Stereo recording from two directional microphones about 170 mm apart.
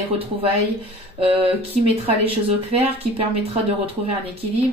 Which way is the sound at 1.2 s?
35° right (ahead or behind).